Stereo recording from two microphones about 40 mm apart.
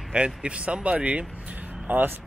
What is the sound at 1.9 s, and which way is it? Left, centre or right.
Speech, right.